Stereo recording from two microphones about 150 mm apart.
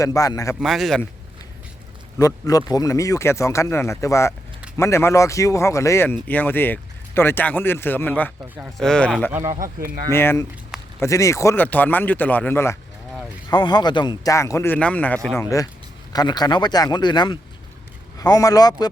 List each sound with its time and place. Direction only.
0.0 s speech: 20° left (ahead or behind)
0.6 s speech: centre (ahead or behind)
2.1 s speech: 25° left (ahead or behind); by 9.1 s 5° left (ahead or behind)
9.3 s speech: 20° right (ahead or behind)
9.6 s speech: 70° right (ahead or behind)
10.1 s speech: 15° left (ahead or behind)
13.5 s speech: 30° left (ahead or behind); by 15.4 s 5° left (ahead or behind)
15.4 s speech: 20° left (ahead or behind)